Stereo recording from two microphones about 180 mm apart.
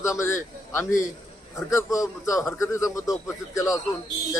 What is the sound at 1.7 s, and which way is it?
A man's voice, 20° left (ahead or behind).